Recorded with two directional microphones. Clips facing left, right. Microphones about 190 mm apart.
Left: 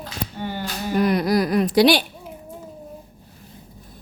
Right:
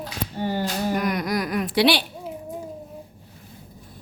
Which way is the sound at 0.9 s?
30° left (ahead or behind).